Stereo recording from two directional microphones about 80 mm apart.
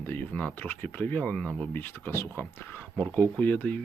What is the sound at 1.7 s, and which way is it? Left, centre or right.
Speech, left.